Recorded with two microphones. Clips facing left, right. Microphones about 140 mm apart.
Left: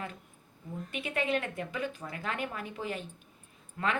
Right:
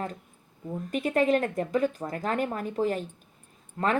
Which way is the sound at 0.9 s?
40° right (ahead or behind).